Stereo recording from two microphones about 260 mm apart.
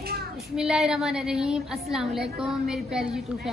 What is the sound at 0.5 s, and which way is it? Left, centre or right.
A woman's voice, centre.